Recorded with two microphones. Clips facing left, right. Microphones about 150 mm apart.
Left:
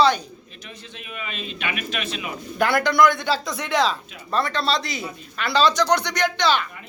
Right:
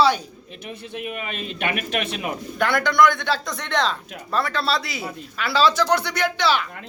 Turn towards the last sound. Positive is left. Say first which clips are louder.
# even
turn(degrees=-5)  # may be behind; listen again after turning